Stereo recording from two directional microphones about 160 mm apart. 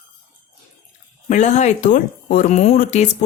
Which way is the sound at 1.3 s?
50° left (ahead or behind).